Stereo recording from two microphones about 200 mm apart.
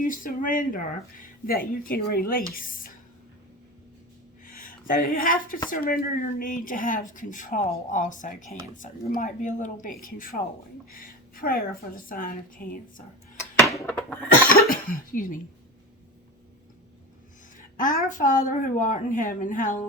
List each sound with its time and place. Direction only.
0.0 s speech: 45° left (ahead or behind)
4.4 s a sound: 45° left (ahead or behind)
5.6 s speech: 45° left (ahead or behind)
13.7 s a sound: 5° left (ahead or behind)
14.7 s speech: 45° left (ahead or behind)
17.6 s speech: 40° left (ahead or behind)